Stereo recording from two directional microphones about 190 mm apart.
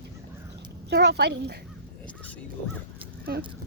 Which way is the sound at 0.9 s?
60° right (ahead or behind).